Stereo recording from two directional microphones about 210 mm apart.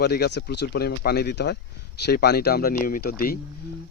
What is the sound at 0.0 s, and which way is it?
Speech, 50° left (ahead or behind).